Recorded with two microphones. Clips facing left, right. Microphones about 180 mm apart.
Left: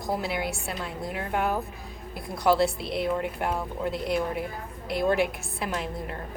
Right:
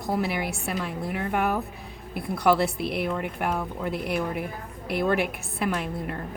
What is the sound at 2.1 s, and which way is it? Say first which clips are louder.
A woman's voice: right 1 dB; 60° right (ahead or behind).